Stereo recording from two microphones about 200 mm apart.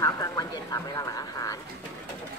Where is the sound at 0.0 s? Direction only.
20° left (ahead or behind).